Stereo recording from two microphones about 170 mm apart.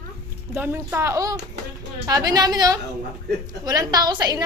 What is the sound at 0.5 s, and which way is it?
A woman's voice, 10° right (ahead or behind).